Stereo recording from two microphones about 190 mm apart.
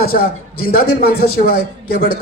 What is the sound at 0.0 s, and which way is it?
A man's voice, 50° left (ahead or behind).